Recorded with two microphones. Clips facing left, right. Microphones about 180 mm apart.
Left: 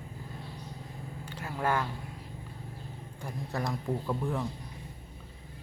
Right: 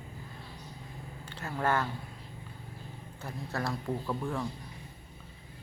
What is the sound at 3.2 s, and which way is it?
Speech, 15° left (ahead or behind).